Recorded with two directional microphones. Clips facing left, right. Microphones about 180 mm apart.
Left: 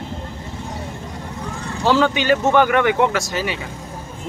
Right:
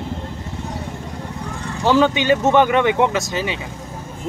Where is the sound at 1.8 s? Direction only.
15° right (ahead or behind).